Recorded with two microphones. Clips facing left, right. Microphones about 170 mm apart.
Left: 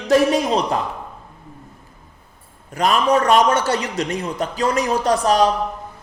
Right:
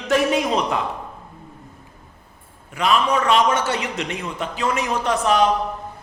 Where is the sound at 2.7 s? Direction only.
40° left (ahead or behind).